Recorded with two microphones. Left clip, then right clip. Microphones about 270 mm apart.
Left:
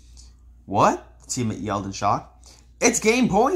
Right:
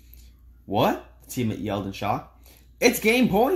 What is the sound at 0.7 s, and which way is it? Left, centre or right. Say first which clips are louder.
Speech: left 4 dB; centre.